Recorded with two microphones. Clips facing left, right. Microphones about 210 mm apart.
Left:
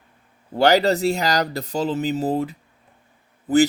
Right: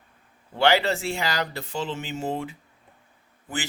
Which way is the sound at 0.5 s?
40° left (ahead or behind).